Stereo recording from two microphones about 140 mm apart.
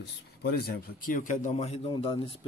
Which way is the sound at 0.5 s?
90° left.